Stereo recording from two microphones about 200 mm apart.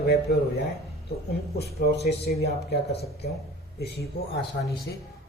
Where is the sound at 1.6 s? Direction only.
50° left (ahead or behind).